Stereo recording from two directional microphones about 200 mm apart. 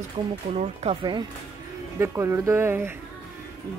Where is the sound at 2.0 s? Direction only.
15° right (ahead or behind).